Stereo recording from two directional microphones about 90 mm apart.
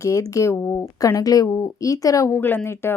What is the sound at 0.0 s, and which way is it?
Speech, 35° left (ahead or behind).